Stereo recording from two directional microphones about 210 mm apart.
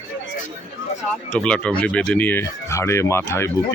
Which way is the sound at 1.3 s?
5° left (ahead or behind).